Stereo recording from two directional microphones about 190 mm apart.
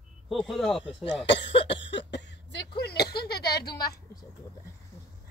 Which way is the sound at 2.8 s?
60° left (ahead or behind).